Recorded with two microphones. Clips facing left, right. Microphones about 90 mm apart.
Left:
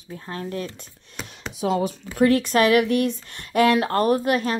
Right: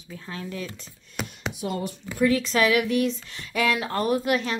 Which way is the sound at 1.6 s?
90° left.